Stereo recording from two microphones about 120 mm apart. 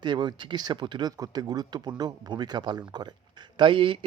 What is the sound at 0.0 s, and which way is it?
Speech, 40° right (ahead or behind).